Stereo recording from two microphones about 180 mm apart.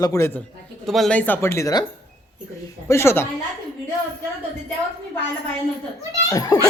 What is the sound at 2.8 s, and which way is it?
Speech, 15° left (ahead or behind).